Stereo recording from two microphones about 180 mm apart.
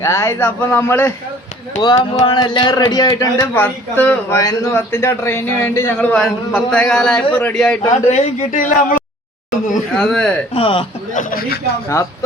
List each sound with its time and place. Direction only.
0.0 s a man's voice: 15° left (ahead or behind)
2.0 s music: 35° left (ahead or behind)
2.3 s a man's voice: 25° left (ahead or behind); by 7.8 s 5° left (ahead or behind)
8.1 s speech: 45° left (ahead or behind)
9.9 s speech: 5° left (ahead or behind)
10.5 s speech: 30° left (ahead or behind)
11.1 s speech: 50° left (ahead or behind)